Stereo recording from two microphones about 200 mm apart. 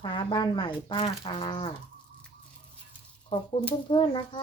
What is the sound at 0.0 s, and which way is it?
Speech, 25° left (ahead or behind).